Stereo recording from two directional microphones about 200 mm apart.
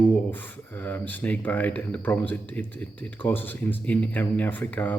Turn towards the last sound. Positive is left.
turn(degrees=10)  # may be behind; listen again after turning